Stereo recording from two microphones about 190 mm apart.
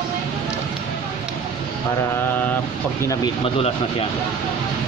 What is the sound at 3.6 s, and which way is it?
Speech, 30° left (ahead or behind).